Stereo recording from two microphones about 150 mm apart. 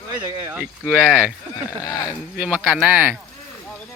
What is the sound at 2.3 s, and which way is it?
Speech, 10° right (ahead or behind).